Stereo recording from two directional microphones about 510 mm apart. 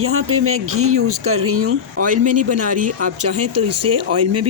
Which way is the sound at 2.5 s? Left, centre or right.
Centre.